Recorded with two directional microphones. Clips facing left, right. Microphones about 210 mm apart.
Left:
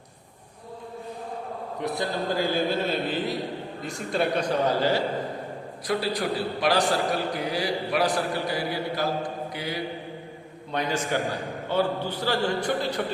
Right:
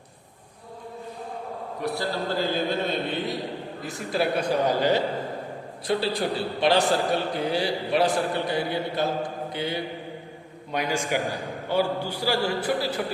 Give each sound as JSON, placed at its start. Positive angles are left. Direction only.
{"t": 1.8, "sound": "a man's voice", "side_deg": 15}
{"t": 10.7, "sound": "a man's voice", "side_deg": -10}